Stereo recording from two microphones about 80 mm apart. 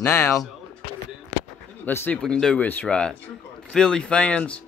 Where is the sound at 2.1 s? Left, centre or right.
Centre.